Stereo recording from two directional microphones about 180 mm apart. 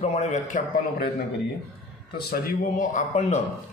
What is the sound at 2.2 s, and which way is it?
Speech, 55° left (ahead or behind).